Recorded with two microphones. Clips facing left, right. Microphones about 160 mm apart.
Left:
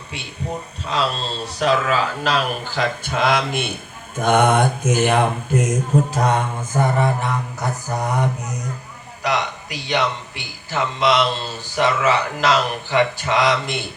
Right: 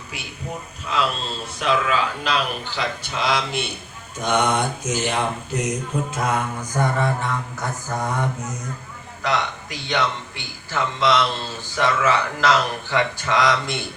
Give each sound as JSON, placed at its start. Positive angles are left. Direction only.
{"t": 0.9, "sound": "speech", "side_deg": 30}
{"t": 6.7, "sound": "a man's voice", "side_deg": 20}